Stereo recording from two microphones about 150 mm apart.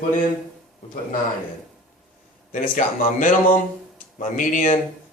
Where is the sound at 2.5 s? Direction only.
60° left (ahead or behind).